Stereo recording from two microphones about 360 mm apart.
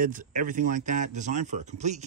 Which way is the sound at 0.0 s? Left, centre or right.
Right.